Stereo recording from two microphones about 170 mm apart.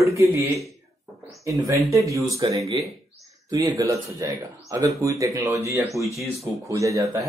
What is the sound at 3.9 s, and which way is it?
Speech, 20° right (ahead or behind).